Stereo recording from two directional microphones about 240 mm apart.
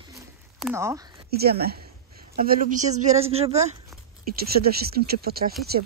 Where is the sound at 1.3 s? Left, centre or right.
Right.